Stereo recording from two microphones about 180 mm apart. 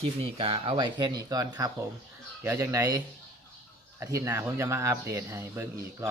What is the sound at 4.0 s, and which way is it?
Speech, 15° right (ahead or behind).